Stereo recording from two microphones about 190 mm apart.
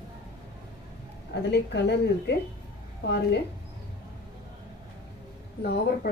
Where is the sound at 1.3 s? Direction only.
65° left (ahead or behind).